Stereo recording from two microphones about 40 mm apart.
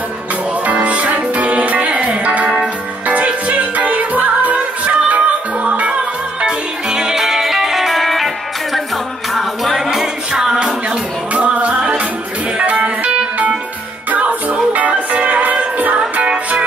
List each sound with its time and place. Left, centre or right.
0.7 s music: right
6.4 s music: centre
9.3 s music: centre
9.8 s music: centre
11.3 s music: right